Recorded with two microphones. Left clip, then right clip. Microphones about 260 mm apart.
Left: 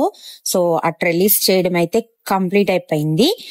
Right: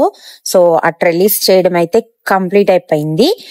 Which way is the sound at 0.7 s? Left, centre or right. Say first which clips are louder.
Right 6 dB; centre.